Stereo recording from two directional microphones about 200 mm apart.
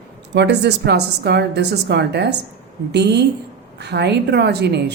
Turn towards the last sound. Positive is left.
turn(degrees=-55)  # may be behind; listen again after turning